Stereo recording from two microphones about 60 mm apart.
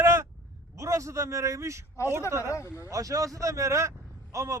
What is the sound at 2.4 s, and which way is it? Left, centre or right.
Speech, left.